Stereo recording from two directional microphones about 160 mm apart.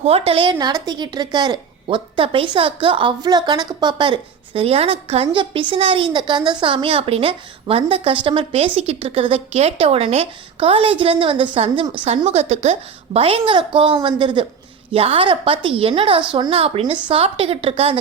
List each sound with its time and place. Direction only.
0.0 s a woman's voice: 35° right (ahead or behind)